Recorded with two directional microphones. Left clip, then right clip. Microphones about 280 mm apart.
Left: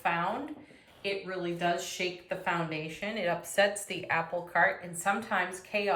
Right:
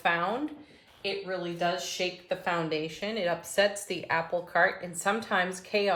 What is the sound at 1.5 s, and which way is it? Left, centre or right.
Speech, centre.